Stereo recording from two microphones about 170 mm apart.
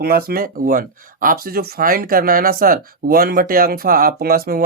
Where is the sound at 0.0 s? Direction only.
65° right (ahead or behind).